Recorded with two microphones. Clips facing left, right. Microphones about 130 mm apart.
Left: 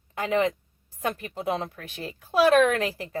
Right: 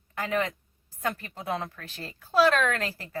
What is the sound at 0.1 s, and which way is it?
A woman's voice, 20° left (ahead or behind).